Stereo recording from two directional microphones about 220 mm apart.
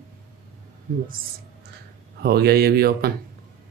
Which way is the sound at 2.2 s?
45° right (ahead or behind).